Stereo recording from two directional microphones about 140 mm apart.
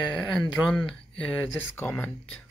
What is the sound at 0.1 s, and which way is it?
Speech, 5° left (ahead or behind).